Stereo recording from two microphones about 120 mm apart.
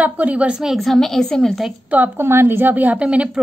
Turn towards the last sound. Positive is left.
turn(degrees=-10)  # may be behind; listen again after turning